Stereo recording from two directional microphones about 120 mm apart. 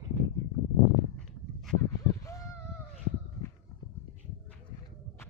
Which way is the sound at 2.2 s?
30° left (ahead or behind).